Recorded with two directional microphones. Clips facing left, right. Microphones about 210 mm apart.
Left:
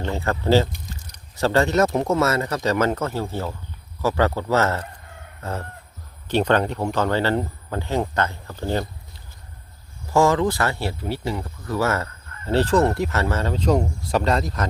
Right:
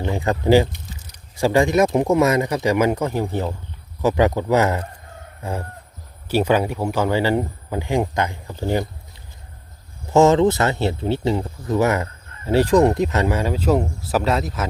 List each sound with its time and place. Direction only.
0.0 s speech: 15° right (ahead or behind)
5.4 s chicken: 15° right (ahead or behind)
6.2 s speech: 10° right (ahead or behind)
10.1 s speech: 20° right (ahead or behind); by 14.7 s 5° right (ahead or behind)